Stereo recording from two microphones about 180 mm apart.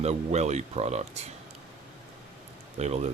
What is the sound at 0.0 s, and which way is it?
Speech, 35° right (ahead or behind).